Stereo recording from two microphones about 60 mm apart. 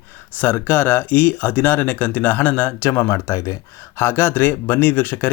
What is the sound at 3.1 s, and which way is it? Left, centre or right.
Speech, left.